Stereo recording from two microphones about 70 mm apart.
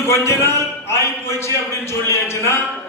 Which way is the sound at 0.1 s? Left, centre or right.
Left.